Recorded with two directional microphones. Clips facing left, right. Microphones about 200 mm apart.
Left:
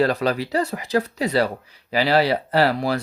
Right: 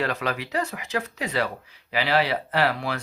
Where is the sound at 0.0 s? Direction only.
35° left (ahead or behind).